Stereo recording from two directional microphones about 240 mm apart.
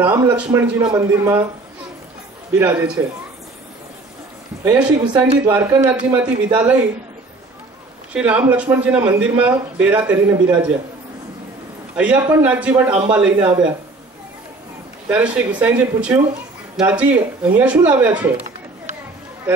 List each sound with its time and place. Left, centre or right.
0.0 s a man's voice: centre
3.0 s a man's voice: centre
4.6 s a man's voice: centre
8.1 s a man's voice: centre
11.9 s a man's voice: centre
15.0 s a man's voice: centre